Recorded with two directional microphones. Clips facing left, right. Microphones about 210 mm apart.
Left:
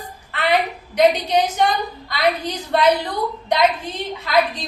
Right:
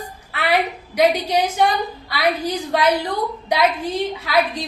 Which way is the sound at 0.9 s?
10° right (ahead or behind).